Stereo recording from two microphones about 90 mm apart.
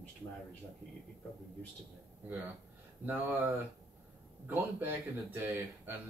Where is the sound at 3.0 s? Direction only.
20° right (ahead or behind).